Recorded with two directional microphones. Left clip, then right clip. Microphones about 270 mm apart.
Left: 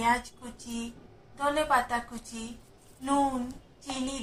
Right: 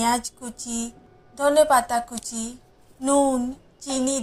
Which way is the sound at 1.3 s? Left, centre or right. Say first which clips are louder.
Right 9 dB; right.